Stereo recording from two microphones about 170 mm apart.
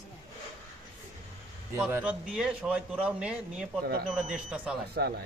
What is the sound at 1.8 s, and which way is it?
A man's voice, 10° right (ahead or behind).